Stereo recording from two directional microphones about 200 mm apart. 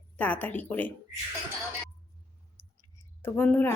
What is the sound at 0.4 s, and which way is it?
Speech, 10° left (ahead or behind).